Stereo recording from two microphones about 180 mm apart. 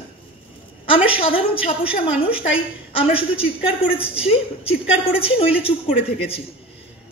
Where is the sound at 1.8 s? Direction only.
30° left (ahead or behind).